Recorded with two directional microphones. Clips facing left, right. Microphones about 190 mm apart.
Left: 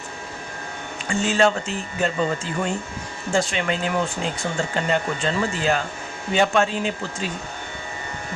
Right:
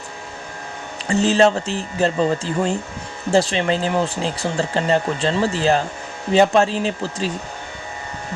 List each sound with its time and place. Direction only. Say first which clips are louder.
1.0 s speech: right 4 dB; 35° right (ahead or behind)